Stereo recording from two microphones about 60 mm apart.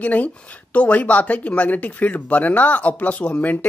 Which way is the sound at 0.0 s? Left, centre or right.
Left.